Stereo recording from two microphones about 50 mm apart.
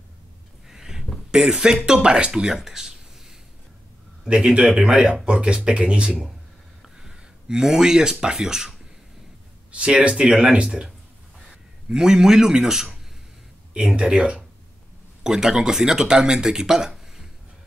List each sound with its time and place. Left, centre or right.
0.7 s a sound: centre
1.3 s speech: centre
5.2 s speech: right
6.8 s speech: centre
9.7 s a man's voice: right
13.7 s speech: right